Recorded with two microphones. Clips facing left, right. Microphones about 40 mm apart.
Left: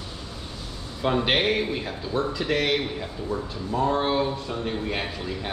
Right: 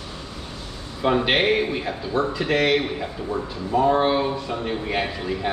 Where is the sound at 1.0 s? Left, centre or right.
Centre.